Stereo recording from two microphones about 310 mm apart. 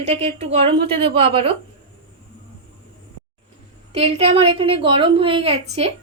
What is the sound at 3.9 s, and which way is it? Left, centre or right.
A woman's voice, centre.